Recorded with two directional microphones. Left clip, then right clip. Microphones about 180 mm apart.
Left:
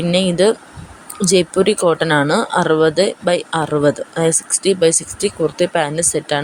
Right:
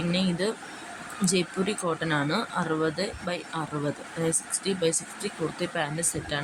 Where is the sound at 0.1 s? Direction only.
45° left (ahead or behind).